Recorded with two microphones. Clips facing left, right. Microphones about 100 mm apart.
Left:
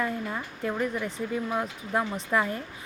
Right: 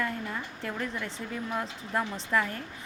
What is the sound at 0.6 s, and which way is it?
A woman's voice, 20° left (ahead or behind).